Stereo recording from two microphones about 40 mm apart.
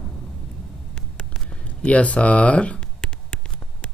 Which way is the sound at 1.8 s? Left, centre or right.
Left.